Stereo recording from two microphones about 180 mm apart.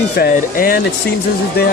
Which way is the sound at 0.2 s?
55° left (ahead or behind).